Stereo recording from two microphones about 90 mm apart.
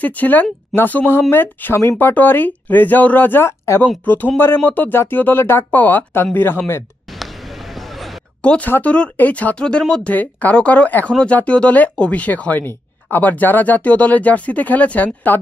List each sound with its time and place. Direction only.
0.0 s speech: 20° left (ahead or behind)
7.7 s a sound: centre (ahead or behind)
8.4 s speech: 15° left (ahead or behind)